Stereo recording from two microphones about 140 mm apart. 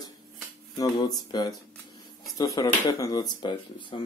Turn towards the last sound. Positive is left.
turn(degrees=35)  # may be behind; listen again after turning